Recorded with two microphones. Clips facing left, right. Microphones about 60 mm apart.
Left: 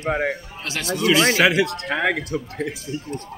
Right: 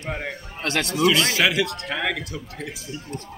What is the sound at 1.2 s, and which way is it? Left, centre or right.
Speech, left.